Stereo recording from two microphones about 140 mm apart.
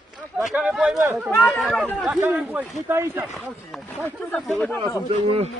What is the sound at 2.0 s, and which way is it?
Speech, 10° right (ahead or behind).